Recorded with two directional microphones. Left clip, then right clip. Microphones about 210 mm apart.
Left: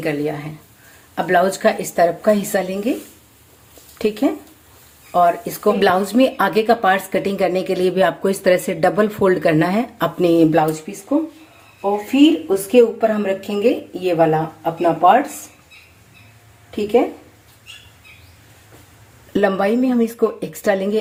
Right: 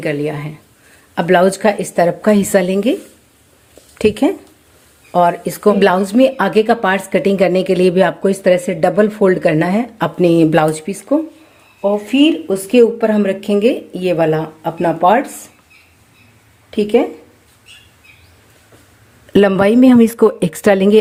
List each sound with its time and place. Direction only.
0.0 s speech: 25° right (ahead or behind)
3.9 s speech: 30° right (ahead or behind)
5.8 s a woman's voice: 15° right (ahead or behind)
12.1 s speech: 45° right (ahead or behind)
16.7 s speech: 45° right (ahead or behind)
19.3 s speech: 30° right (ahead or behind)